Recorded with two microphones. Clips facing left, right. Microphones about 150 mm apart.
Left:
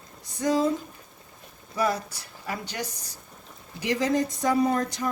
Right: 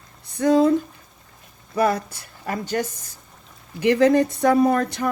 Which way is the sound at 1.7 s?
55° right (ahead or behind).